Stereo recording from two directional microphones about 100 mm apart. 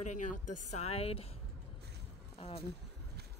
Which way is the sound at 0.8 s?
85° left.